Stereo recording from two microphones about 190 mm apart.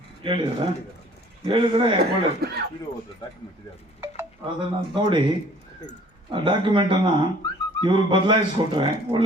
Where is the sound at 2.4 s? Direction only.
55° right (ahead or behind).